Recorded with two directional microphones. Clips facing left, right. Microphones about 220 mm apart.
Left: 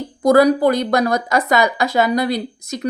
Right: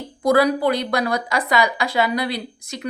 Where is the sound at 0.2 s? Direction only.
45° left (ahead or behind).